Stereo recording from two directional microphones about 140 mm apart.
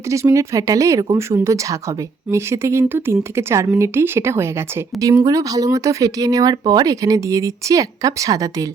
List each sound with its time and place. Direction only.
0.1 s speech: 20° right (ahead or behind)